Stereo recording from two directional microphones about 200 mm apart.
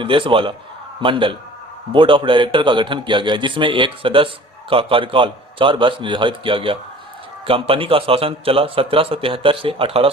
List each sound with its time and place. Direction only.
0.0 s a man's voice: 25° right (ahead or behind)